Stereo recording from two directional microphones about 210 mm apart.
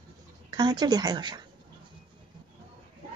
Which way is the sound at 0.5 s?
20° right (ahead or behind).